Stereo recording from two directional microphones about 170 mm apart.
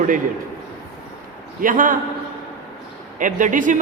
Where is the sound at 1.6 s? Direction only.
50° right (ahead or behind).